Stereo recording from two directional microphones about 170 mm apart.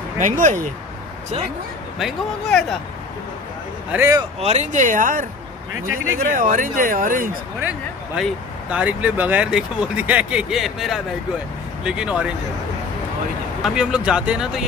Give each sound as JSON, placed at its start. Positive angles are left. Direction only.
{"t": 0.2, "sound": "speech", "side_deg": -45}
{"t": 2.0, "sound": "speech", "side_deg": 0}
{"t": 3.9, "sound": "speech", "side_deg": -15}
{"t": 4.4, "sound": "speech", "side_deg": -40}
{"t": 7.6, "sound": "speech", "side_deg": -5}
{"t": 13.6, "sound": "speech", "side_deg": -5}